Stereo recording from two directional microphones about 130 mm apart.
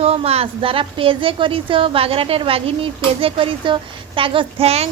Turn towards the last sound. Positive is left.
turn(degrees=-50)  # may be behind; listen again after turning